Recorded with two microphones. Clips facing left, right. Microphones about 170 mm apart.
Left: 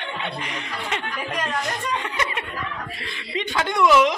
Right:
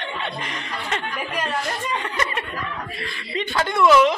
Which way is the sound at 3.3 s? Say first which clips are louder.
Right 1 dB; 15° left (ahead or behind).